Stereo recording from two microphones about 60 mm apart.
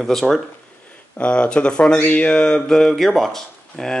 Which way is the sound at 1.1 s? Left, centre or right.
Left.